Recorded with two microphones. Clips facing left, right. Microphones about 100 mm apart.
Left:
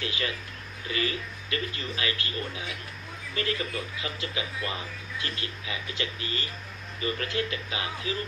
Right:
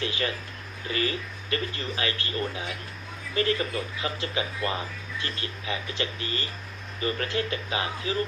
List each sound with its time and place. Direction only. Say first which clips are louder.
0.0 s speech: right 3 dB; 35° right (ahead or behind)